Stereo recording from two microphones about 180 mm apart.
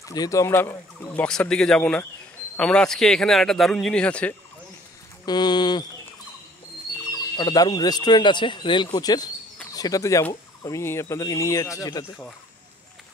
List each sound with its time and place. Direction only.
0.0 s a man's voice: 20° left (ahead or behind)
5.2 s speech: 25° left (ahead or behind)
7.3 s speech: 20° left (ahead or behind)